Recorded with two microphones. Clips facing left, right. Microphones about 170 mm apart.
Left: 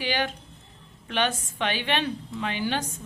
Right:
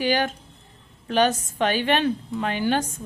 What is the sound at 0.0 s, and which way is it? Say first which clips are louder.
A woman's voice: right 5 dB; 45° right (ahead or behind).